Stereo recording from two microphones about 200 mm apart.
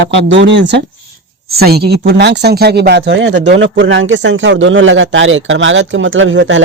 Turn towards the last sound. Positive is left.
turn(degrees=-70)  # may be behind; listen again after turning